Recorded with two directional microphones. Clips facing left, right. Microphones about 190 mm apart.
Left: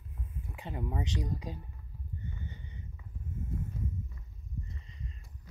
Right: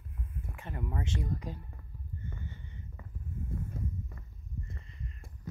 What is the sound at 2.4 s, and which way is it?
Sniff, 15° left (ahead or behind).